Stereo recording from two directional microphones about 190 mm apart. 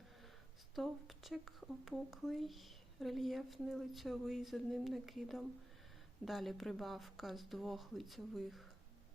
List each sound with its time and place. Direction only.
0.8 s speech: centre (ahead or behind)